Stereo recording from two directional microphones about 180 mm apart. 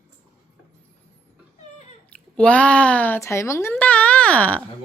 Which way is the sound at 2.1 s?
5° left (ahead or behind).